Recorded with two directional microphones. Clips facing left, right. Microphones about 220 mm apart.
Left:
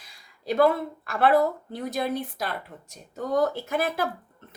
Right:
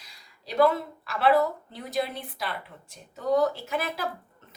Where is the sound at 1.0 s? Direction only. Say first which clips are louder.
Left 2 dB; 50° left (ahead or behind).